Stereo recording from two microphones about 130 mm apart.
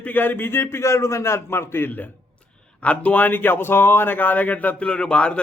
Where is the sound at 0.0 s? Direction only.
15° left (ahead or behind).